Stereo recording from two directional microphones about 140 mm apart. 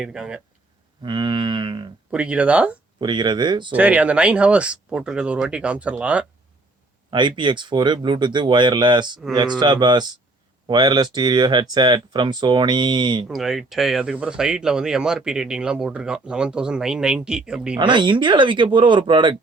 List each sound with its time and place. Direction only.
0.0 s speech: 5° right (ahead or behind)
1.0 s speech: 35° right (ahead or behind)
2.0 s speech: 10° right (ahead or behind)
3.0 s speech: 30° right (ahead or behind)
3.7 s speech: 10° right (ahead or behind)
7.1 s speech: 35° right (ahead or behind)
13.2 s speech: centre (ahead or behind)
17.7 s speech: 35° right (ahead or behind)